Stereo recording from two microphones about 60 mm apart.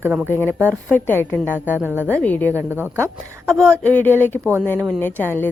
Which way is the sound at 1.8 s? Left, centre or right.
Right.